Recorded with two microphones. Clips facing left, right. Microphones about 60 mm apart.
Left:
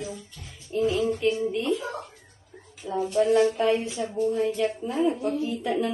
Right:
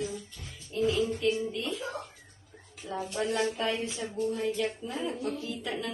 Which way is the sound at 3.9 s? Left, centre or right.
Left.